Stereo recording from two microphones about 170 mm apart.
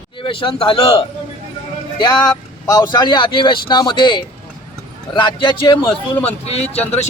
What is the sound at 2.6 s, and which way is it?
Speech, 25° left (ahead or behind).